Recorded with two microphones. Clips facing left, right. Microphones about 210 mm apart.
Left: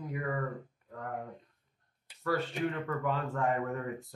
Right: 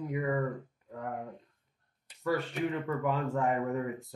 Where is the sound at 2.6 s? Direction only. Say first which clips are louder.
Right 2 dB; 15° right (ahead or behind).